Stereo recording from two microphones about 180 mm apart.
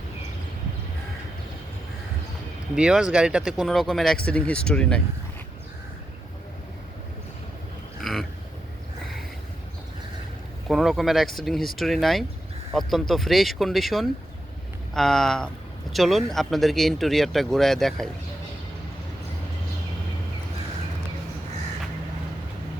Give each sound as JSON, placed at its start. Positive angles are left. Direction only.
{"t": 2.7, "sound": "speech", "side_deg": -5}
{"t": 8.0, "sound": "a sound", "side_deg": 0}
{"t": 10.7, "sound": "speech", "side_deg": 0}